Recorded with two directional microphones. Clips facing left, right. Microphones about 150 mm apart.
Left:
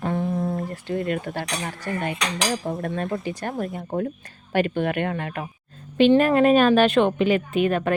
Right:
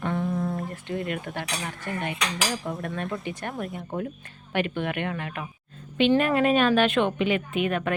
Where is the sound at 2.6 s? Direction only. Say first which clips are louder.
Left 4 dB; 25° left (ahead or behind).